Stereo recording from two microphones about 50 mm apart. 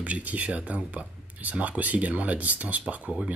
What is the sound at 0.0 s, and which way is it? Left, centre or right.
Speech, right.